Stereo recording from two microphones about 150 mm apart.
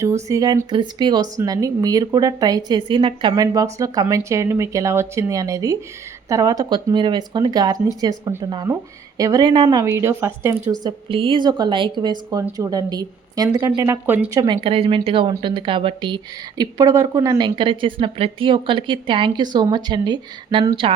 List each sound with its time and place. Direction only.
0.0 s speech: 20° right (ahead or behind)
9.6 s speech: 20° right (ahead or behind)
10.8 s speech: 35° right (ahead or behind)